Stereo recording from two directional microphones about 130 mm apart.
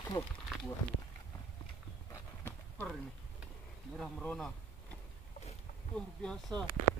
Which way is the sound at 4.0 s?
5° left (ahead or behind).